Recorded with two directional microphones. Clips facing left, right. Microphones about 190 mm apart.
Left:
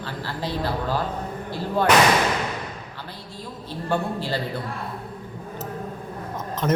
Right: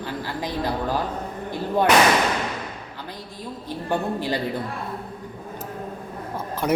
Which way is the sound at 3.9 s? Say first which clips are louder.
Right 1 dB; 15° right (ahead or behind).